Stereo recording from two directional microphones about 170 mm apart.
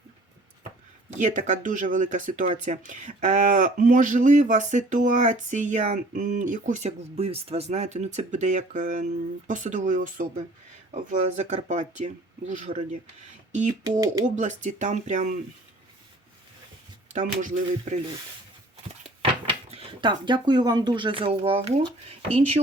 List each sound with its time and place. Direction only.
1.1 s speech: 45° right (ahead or behind)
14.3 s speech: 45° right (ahead or behind)
17.1 s speech: 45° right (ahead or behind)
19.2 s speech: 30° right (ahead or behind)